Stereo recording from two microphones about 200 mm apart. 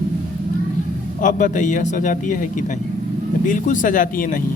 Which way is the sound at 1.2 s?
40° left (ahead or behind).